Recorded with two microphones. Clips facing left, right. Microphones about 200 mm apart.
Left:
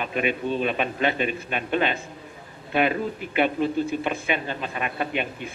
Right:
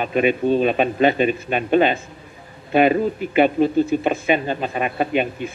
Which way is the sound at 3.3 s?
40° right (ahead or behind).